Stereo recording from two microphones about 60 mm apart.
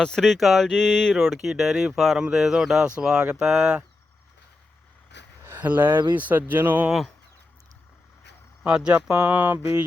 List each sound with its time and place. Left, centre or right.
0.0 s speech: centre
5.5 s speech: right
8.6 s speech: centre
9.0 s speech: right